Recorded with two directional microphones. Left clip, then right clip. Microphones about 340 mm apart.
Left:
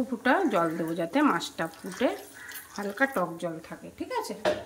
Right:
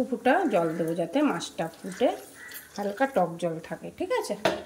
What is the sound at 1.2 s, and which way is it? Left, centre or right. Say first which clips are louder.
Speech: left 4 dB; left.